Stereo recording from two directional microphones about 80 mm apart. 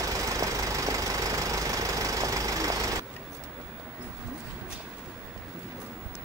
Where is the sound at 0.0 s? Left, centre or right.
Right.